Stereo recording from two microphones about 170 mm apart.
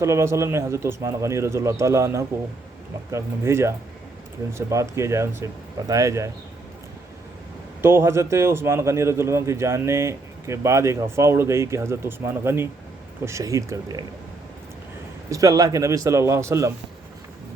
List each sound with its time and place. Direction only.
0.0 s a man's voice: 15° right (ahead or behind)
7.8 s a man's voice: 15° right (ahead or behind)
15.3 s a man's voice: 20° right (ahead or behind)